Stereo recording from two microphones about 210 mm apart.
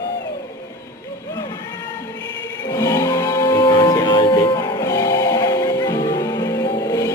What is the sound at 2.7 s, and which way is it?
Music, 15° left (ahead or behind).